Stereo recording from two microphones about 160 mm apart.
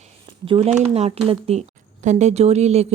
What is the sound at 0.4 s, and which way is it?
Speech, 35° right (ahead or behind).